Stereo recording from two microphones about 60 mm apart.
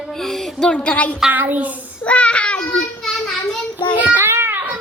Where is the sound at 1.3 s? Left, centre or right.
Right.